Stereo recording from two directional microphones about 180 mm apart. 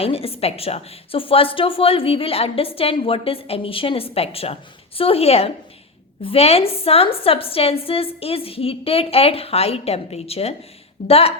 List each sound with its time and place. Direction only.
0.0 s a woman's voice: 35° left (ahead or behind)